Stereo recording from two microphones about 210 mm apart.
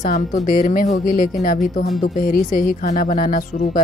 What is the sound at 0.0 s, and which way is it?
A woman's voice, 40° left (ahead or behind).